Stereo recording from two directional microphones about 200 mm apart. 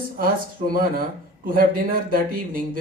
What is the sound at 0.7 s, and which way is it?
A man's voice, 45° right (ahead or behind).